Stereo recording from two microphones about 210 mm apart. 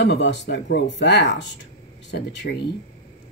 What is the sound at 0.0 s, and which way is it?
A woman's voice, 55° left (ahead or behind).